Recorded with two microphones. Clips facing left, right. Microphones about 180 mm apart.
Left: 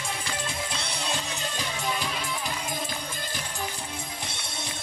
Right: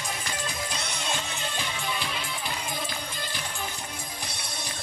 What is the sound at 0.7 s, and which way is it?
Music, 30° left (ahead or behind).